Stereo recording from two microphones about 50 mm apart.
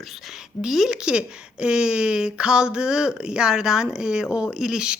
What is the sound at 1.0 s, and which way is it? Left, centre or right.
Speech, centre.